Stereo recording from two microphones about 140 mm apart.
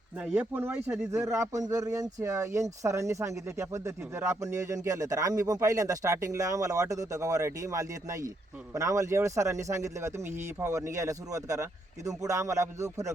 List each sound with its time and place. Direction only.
0.2 s speech: 10° right (ahead or behind)
1.1 s a man's voice: 25° right (ahead or behind)